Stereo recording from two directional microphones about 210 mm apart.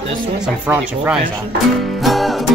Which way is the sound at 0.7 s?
5° right (ahead or behind).